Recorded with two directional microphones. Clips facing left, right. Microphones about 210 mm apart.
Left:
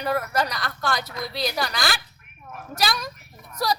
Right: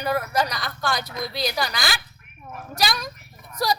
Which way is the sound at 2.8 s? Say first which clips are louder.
Even; centre (ahead or behind).